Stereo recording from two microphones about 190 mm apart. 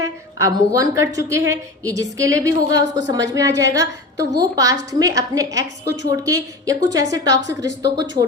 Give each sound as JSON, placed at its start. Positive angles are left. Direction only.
{"t": 0.0, "sound": "a woman's voice", "side_deg": -20}